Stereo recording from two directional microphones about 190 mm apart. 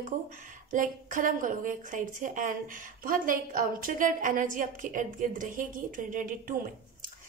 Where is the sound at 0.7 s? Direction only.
45° right (ahead or behind).